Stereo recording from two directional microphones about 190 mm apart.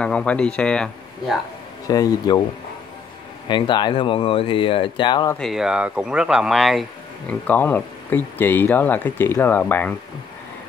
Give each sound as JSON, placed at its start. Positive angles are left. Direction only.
{"t": 0.0, "sound": "speech", "side_deg": 5}
{"t": 1.9, "sound": "speech", "side_deg": 20}
{"t": 3.4, "sound": "speech", "side_deg": 25}
{"t": 5.4, "sound": "speech", "side_deg": 0}